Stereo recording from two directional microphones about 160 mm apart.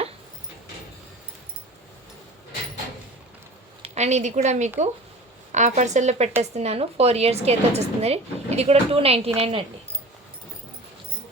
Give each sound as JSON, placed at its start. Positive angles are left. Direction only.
{"t": 3.8, "sound": "a woman's voice", "side_deg": -45}